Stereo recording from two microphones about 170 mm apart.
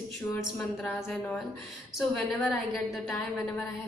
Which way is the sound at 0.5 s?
5° left (ahead or behind).